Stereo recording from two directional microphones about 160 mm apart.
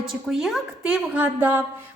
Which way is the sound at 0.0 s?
Centre (ahead or behind).